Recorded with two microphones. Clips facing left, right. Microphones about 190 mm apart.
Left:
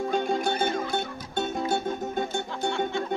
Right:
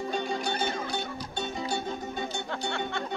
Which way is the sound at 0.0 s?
50° left (ahead or behind).